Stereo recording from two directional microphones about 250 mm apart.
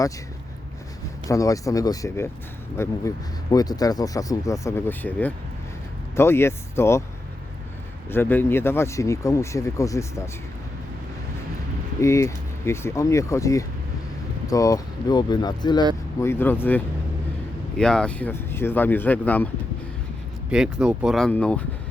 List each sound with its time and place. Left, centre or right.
1.3 s speech: centre
8.1 s speech: centre
11.9 s speech: centre
20.5 s speech: centre